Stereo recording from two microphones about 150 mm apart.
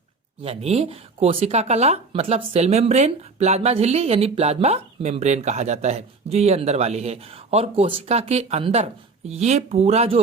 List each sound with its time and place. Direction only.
0.4 s speech: 40° right (ahead or behind)